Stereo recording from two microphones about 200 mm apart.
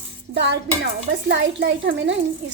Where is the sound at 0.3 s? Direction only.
60° right (ahead or behind).